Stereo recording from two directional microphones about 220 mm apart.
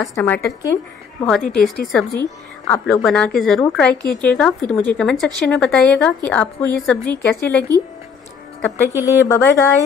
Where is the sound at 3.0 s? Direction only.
5° left (ahead or behind).